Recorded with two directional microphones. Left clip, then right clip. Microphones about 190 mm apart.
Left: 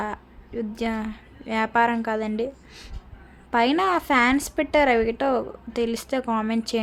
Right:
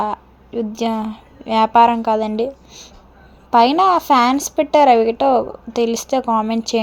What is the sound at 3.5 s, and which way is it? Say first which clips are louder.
A woman's voice: right 9 dB; 15° right (ahead or behind).